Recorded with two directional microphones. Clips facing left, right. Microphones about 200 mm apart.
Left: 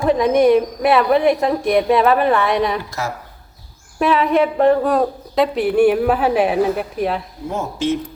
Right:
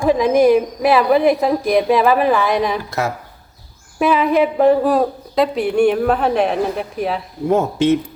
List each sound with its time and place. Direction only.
0.0 s speech: centre (ahead or behind)
4.0 s speech: centre (ahead or behind)
7.5 s speech: 60° right (ahead or behind)